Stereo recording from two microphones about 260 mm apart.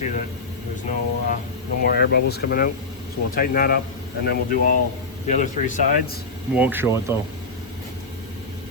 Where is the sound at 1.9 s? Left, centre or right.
Left.